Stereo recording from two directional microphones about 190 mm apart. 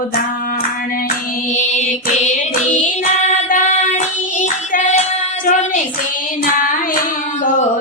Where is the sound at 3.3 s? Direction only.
40° left (ahead or behind).